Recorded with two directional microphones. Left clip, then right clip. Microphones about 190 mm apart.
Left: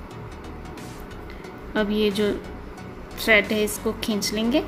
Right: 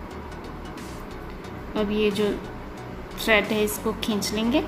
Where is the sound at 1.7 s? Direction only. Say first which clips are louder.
Left 1 dB; 25° left (ahead or behind).